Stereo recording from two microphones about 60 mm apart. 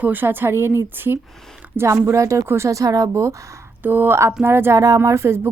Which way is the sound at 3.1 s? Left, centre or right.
Right.